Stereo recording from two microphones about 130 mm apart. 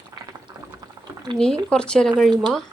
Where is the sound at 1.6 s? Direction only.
5° left (ahead or behind).